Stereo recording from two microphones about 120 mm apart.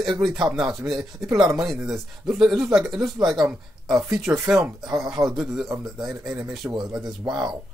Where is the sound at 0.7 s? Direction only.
Centre (ahead or behind).